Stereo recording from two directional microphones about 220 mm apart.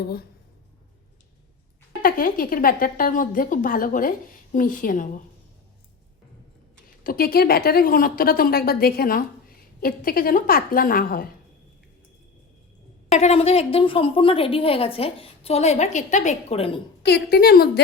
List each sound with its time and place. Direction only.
0.0 s a woman's voice: 45° left (ahead or behind)
2.0 s a woman's voice: 40° left (ahead or behind)
7.0 s a woman's voice: 40° left (ahead or behind)
13.1 s a woman's voice: 30° left (ahead or behind)
17.0 s a woman's voice: 45° left (ahead or behind)